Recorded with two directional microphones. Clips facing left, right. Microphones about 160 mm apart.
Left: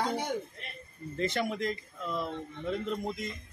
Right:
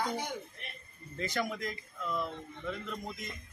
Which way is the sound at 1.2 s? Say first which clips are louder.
Left 4 dB; 25° left (ahead or behind).